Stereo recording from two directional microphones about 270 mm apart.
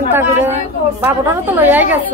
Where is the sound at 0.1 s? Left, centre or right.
Centre.